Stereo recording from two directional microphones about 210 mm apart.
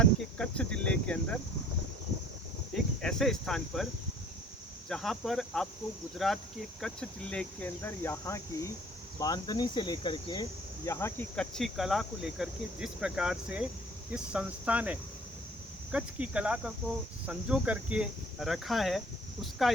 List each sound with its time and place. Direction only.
0.0 s cricket: 5° left (ahead or behind)
2.7 s speech: centre (ahead or behind)
4.9 s cricket: centre (ahead or behind)
6.1 s speech: centre (ahead or behind)
9.1 s cricket: 20° left (ahead or behind)
10.8 s cricket: 10° left (ahead or behind)